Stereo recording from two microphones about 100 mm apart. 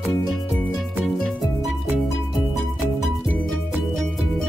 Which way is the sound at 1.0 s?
Centre (ahead or behind).